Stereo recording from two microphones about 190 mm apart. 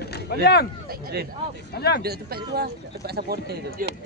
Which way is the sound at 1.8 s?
55° left (ahead or behind).